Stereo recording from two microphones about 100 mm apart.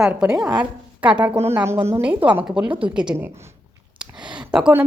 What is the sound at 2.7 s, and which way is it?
Speech, 60° right (ahead or behind).